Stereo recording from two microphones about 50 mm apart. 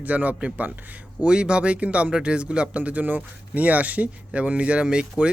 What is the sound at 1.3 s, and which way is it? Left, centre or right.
Speech, centre.